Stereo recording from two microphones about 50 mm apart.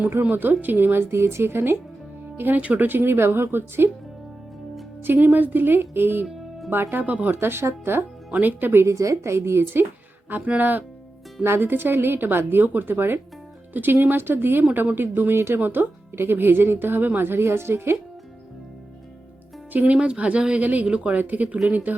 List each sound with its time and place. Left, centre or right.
0.1 s a woman's voice: right
2.6 s a woman's voice: right
5.0 s a woman's voice: right
7.0 s speech: right
7.3 s a woman's voice: right
8.3 s speech: right
8.8 s a woman's voice: right
10.2 s speech: right
11.4 s a woman's voice: right
19.7 s speech: right
20.8 s speech: centre
21.2 s speech: right